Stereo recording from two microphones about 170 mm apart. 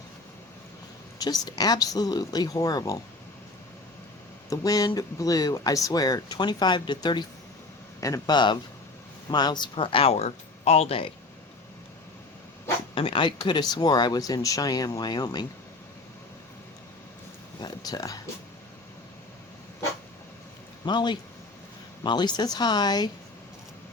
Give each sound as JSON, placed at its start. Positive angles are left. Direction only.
{"t": 1.2, "sound": "speech", "side_deg": 20}
{"t": 4.4, "sound": "speech", "side_deg": 20}
{"t": 12.9, "sound": "speech", "side_deg": 30}
{"t": 17.6, "sound": "speech", "side_deg": 20}
{"t": 20.8, "sound": "speech", "side_deg": 25}